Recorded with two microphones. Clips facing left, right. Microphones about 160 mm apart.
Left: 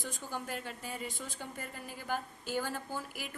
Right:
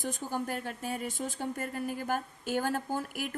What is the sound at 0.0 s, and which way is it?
A woman's voice, 45° right (ahead or behind).